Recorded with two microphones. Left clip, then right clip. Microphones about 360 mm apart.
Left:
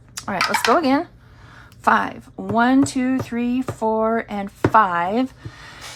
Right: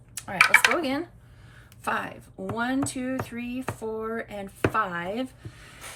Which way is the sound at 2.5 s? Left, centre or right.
Centre.